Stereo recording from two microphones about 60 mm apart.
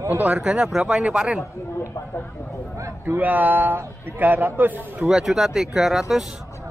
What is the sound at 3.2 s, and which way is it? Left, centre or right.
A man's voice, right.